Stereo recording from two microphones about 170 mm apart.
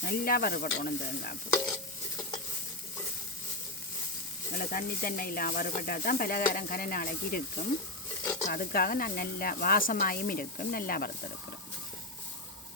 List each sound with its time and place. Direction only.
0.0 s speech: 65° left (ahead or behind)
1.6 s stir: 20° left (ahead or behind)
4.5 s speech: 55° left (ahead or behind)